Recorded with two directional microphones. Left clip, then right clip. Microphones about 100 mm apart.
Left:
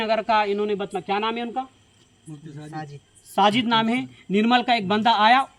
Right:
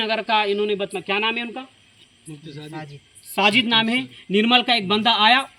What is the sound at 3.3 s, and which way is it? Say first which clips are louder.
Speech: right 2 dB; 25° left (ahead or behind).